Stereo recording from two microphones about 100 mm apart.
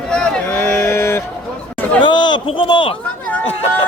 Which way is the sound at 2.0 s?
50° left (ahead or behind).